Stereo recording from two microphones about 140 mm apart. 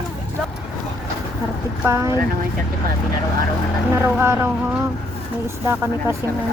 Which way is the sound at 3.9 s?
20° right (ahead or behind).